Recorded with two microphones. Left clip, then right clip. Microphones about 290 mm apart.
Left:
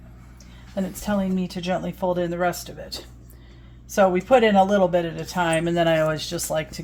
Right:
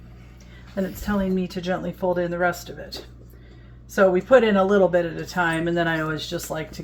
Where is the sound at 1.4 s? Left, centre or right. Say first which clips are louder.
Even; left.